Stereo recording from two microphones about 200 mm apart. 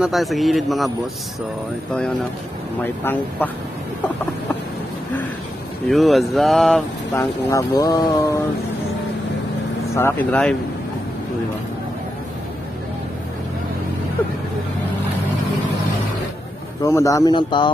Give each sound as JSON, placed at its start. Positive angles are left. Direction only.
{"t": 0.0, "sound": "speech", "side_deg": 0}
{"t": 3.0, "sound": "speech", "side_deg": 10}
{"t": 5.9, "sound": "speech", "side_deg": 0}
{"t": 7.2, "sound": "speech", "side_deg": 15}
{"t": 9.9, "sound": "speech", "side_deg": 10}
{"t": 16.8, "sound": "speech", "side_deg": 15}